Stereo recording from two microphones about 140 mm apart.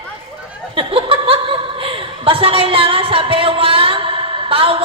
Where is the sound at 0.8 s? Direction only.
40° right (ahead or behind).